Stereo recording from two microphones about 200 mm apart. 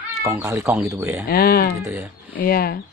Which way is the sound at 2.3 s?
50° left (ahead or behind).